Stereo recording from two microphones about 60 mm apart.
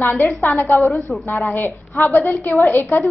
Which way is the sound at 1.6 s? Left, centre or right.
Left.